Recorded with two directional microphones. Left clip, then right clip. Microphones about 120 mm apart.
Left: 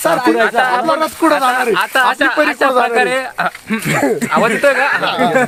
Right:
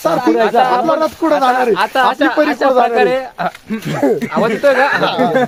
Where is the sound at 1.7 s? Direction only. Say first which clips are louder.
Even; 5° left (ahead or behind).